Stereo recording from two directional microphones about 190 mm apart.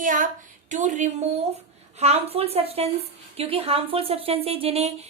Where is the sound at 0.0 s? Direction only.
45° right (ahead or behind).